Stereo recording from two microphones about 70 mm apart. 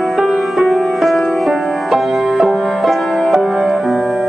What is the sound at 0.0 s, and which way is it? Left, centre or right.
Music, centre.